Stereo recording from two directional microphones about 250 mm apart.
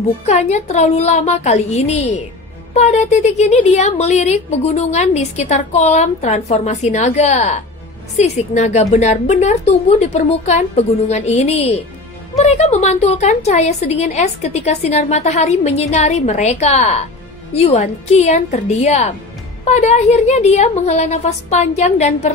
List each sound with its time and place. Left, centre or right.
0.2 s a woman's voice: left